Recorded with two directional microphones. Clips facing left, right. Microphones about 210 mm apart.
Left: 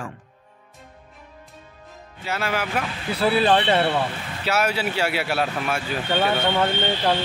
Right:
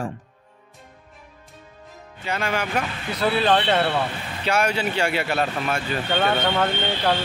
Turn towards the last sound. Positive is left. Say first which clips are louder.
# left 1 dB
turn(degrees=10)  # may be behind; listen again after turning